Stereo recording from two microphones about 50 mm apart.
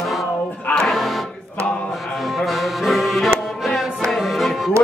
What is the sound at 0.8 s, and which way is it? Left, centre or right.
Music, centre.